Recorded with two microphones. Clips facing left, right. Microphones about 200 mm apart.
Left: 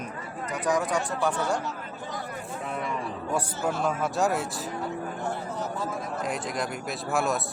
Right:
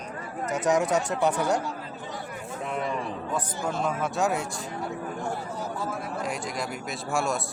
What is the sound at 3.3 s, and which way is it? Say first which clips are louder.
A man's voice: left 3 dB; 10° left (ahead or behind).